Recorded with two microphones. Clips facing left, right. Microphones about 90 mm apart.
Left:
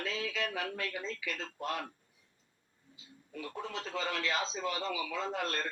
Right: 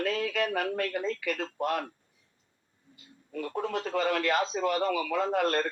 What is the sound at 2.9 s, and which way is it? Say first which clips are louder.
Speech: right 8 dB; 55° right (ahead or behind).